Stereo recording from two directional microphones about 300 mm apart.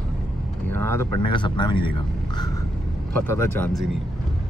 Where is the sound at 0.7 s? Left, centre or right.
Centre.